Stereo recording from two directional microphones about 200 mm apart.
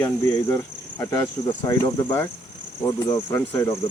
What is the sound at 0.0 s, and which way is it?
Speech, 15° left (ahead or behind).